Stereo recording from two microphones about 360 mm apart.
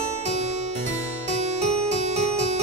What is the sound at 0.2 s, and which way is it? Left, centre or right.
Music, centre.